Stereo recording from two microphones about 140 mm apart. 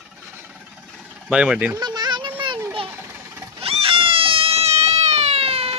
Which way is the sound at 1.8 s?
30° right (ahead or behind).